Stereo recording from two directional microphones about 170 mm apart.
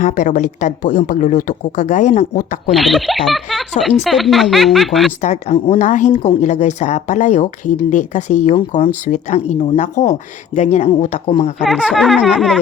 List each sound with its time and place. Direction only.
0.0 s a woman's voice: 50° left (ahead or behind)
2.7 s speech: centre (ahead or behind)
5.2 s a woman's voice: 40° left (ahead or behind)
11.6 s speech: centre (ahead or behind)